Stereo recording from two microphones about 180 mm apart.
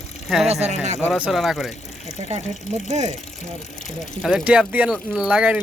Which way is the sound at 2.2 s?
35° right (ahead or behind).